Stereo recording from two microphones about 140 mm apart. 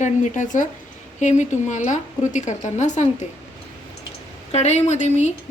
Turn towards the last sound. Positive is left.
turn(degrees=55)  # may be behind; listen again after turning